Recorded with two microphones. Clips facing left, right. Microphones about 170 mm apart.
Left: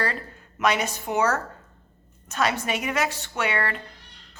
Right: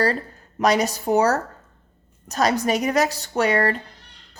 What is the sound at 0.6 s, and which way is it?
A woman's voice, 35° right (ahead or behind).